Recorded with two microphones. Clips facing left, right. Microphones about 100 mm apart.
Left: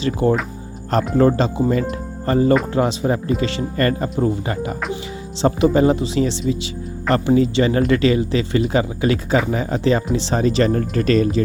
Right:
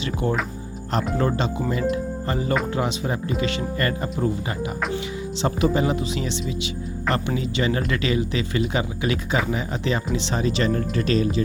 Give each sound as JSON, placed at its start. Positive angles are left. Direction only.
{"t": 0.2, "sound": "speech", "side_deg": 35}
{"t": 1.3, "sound": "speech", "side_deg": 25}
{"t": 1.7, "sound": "speech", "side_deg": 40}